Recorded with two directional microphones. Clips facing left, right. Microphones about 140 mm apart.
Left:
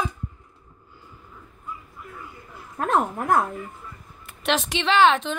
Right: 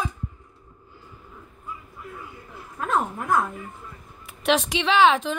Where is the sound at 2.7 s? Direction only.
60° left (ahead or behind).